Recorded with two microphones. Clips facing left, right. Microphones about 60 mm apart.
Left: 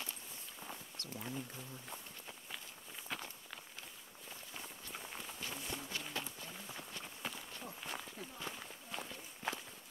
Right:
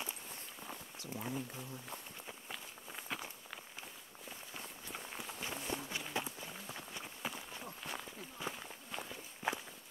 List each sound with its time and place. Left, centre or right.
0.6 s a sound: centre
3.1 s walk: centre
4.6 s run: centre
5.4 s walk: centre